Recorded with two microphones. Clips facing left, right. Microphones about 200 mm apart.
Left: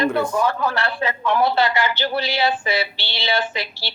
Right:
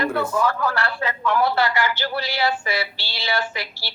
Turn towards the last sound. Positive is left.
turn(degrees=25)  # may be behind; listen again after turning